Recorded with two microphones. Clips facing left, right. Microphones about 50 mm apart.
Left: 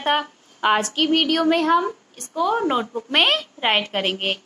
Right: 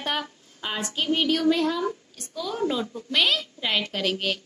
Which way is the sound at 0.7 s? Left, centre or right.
Left.